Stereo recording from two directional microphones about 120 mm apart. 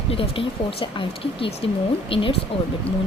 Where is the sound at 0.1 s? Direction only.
50° left (ahead or behind).